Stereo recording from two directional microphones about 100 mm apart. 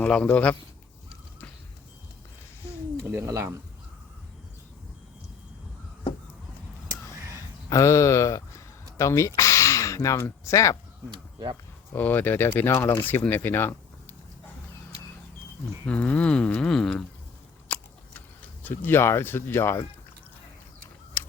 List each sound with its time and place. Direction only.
0.0 s a man's voice: 10° left (ahead or behind)
3.2 s speech: 30° right (ahead or behind)
7.7 s speech: 30° left (ahead or behind)
11.1 s speech: 45° right (ahead or behind)
11.9 s speech: 20° left (ahead or behind)
15.9 s speech: 15° left (ahead or behind)
16.6 s a sound: 5° left (ahead or behind)
17.7 s biting: 15° left (ahead or behind)
18.6 s speech: 20° left (ahead or behind)
21.2 s a sound: 20° left (ahead or behind)